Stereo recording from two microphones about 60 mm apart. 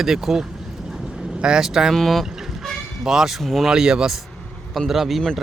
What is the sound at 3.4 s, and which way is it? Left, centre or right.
Speech, centre.